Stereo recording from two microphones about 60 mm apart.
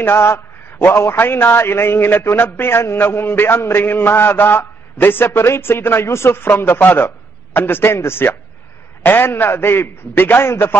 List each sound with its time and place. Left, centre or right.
0.0 s a man's voice: left
6.4 s a man's voice: left